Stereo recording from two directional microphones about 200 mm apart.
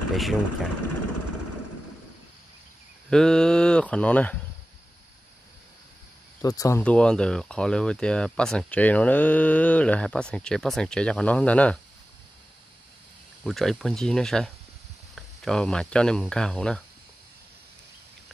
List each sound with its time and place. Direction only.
0.1 s speech: centre (ahead or behind)
3.1 s speech: 5° left (ahead or behind)
6.4 s speech: 15° left (ahead or behind)
6.8 s speech: 5° left (ahead or behind)
13.4 s speech: centre (ahead or behind)